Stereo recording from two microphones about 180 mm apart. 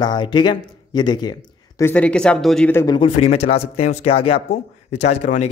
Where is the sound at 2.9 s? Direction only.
35° left (ahead or behind).